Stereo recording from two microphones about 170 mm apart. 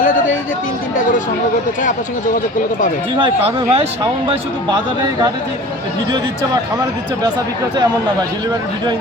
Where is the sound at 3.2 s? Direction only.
30° right (ahead or behind).